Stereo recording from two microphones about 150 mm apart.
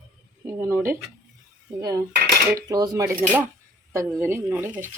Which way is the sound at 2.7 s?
25° right (ahead or behind).